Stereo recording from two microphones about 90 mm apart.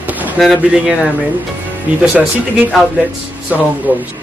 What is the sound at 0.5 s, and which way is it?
Speech, 15° right (ahead or behind).